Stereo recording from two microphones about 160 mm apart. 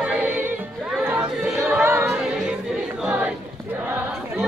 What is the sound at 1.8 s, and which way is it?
A capella, 15° right (ahead or behind).